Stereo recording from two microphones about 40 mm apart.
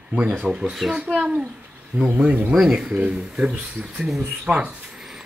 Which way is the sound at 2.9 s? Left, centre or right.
Right.